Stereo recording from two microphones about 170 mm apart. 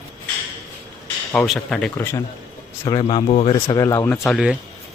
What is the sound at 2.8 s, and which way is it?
Speech, 30° left (ahead or behind).